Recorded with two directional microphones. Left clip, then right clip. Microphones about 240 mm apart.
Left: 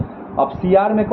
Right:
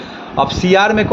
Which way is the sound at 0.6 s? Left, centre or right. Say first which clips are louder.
Right 3 dB; right.